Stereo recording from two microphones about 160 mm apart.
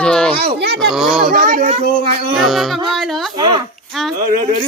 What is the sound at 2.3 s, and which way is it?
Speech, centre (ahead or behind).